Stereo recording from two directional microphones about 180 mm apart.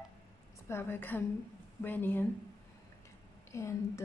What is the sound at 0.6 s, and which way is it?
A woman's voice, 10° left (ahead or behind).